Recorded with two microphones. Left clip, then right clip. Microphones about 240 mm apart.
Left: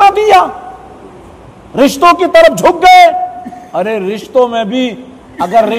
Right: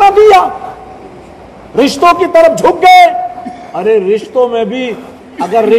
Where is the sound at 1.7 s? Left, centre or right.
Left.